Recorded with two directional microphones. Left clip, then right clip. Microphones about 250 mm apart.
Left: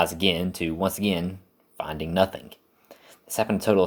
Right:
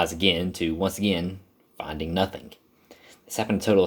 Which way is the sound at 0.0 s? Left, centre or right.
Centre.